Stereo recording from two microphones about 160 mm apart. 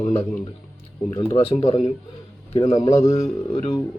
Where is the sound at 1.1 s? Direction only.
35° left (ahead or behind).